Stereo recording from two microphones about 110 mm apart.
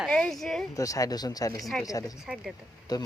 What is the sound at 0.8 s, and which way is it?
Speech, 30° left (ahead or behind).